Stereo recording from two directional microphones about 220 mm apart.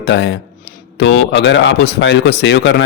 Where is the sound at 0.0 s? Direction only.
50° left (ahead or behind).